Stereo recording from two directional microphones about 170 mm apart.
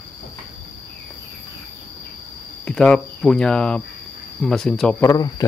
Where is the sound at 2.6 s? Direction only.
5° left (ahead or behind).